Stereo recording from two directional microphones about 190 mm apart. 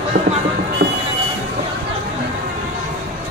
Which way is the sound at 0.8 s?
65° right (ahead or behind).